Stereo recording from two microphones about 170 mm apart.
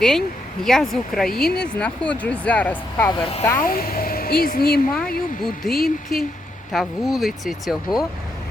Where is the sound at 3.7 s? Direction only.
60° left (ahead or behind).